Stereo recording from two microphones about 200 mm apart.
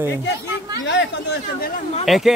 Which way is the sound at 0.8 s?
60° left (ahead or behind).